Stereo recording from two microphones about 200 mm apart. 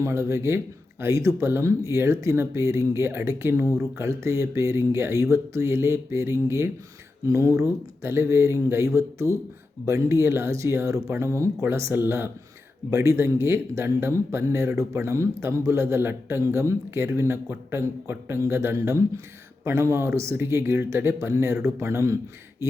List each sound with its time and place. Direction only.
0.0 s a man's voice: 15° right (ahead or behind)